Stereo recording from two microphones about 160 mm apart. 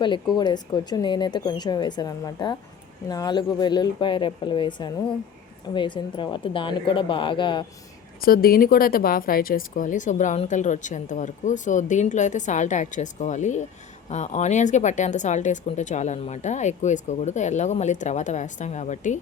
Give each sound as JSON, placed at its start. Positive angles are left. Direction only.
{"t": 0.3, "sound": "a woman's voice", "side_deg": 25}
{"t": 8.2, "sound": "a woman's voice", "side_deg": 70}